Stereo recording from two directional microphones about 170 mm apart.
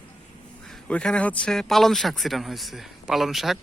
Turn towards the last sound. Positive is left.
turn(degrees=0)  # may be behind; listen again after turning